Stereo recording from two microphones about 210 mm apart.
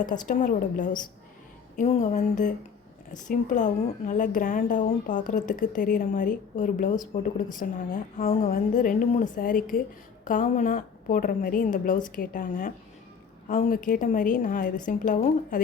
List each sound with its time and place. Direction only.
0.0 s a woman's voice: 40° left (ahead or behind)